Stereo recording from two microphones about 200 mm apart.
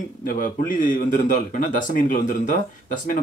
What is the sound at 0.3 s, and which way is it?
Speech, 45° left (ahead or behind).